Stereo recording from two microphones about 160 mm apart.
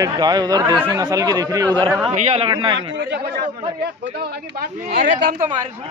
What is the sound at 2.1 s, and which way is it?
Speech, 45° right (ahead or behind).